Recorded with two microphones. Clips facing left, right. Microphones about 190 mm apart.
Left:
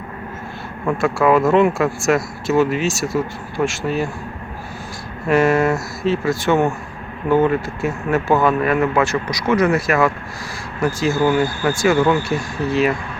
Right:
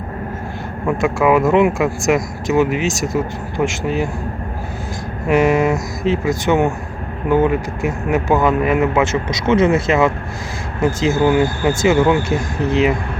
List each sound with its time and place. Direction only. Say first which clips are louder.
0.9 s speech: right 1 dB; 15° right (ahead or behind)
5.3 s speech: right 1 dB; 15° right (ahead or behind)